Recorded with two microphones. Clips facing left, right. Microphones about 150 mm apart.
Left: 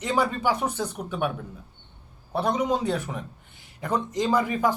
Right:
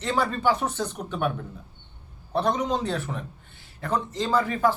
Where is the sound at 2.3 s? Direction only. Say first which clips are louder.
Even; 10° left (ahead or behind).